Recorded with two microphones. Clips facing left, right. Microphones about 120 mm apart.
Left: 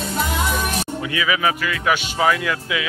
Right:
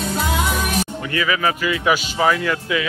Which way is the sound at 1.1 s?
10° left (ahead or behind).